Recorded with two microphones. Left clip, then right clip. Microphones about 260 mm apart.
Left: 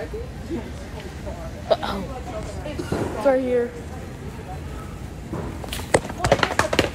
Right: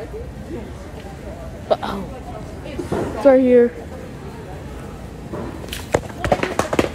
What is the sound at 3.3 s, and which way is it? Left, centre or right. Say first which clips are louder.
Speech: right 8 dB; right.